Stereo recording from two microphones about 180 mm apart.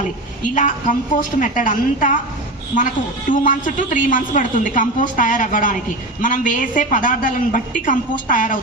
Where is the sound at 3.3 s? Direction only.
45° left (ahead or behind).